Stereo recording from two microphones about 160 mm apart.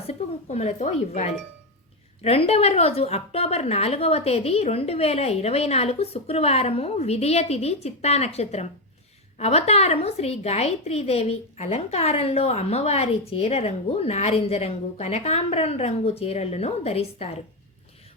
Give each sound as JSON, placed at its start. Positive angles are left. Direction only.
{"t": 0.0, "sound": "a woman's voice", "side_deg": 40}